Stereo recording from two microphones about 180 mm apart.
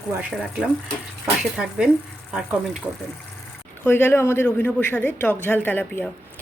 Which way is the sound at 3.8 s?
10° left (ahead or behind).